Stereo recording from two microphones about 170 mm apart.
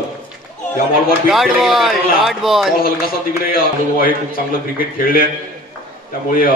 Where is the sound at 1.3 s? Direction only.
Centre (ahead or behind).